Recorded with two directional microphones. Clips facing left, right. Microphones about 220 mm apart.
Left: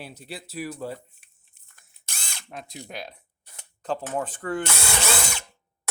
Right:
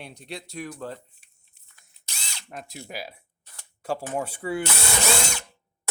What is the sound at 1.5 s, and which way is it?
Drill, 50° left (ahead or behind).